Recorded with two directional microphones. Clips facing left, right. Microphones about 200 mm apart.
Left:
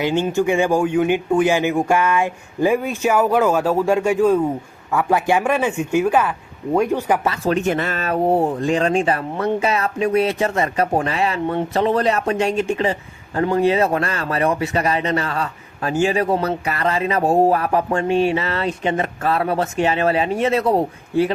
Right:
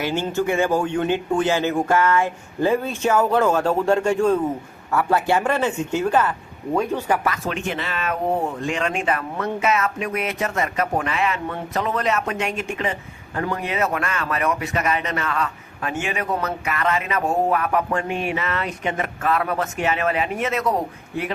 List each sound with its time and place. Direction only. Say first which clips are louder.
0.0 s a man's voice: left 4 dB; 15° left (ahead or behind)
7.3 s speech: left 6 dB; 35° left (ahead or behind)